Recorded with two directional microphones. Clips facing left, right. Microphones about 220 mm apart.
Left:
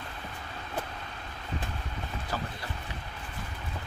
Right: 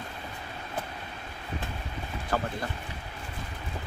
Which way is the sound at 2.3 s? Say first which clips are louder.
Right 6 dB; 55° right (ahead or behind).